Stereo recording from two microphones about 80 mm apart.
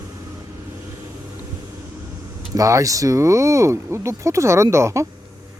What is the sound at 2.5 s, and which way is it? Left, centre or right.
Speech, right.